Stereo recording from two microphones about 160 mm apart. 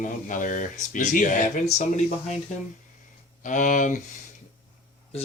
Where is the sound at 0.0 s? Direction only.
55° left (ahead or behind).